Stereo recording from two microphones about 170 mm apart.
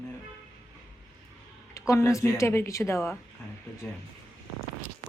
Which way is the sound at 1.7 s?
15° left (ahead or behind).